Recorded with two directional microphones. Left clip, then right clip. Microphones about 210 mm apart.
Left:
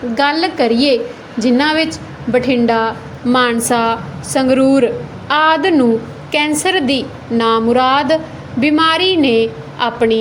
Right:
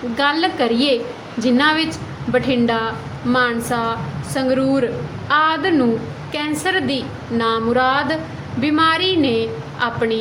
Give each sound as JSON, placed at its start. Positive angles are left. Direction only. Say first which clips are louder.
{"t": 0.2, "sound": "a woman's voice", "louder": "left 3 dB", "side_deg": 20}
{"t": 3.3, "sound": "a woman's voice", "louder": "left 5 dB", "side_deg": 35}